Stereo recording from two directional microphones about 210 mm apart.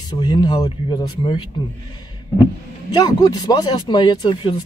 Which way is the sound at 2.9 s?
20° left (ahead or behind).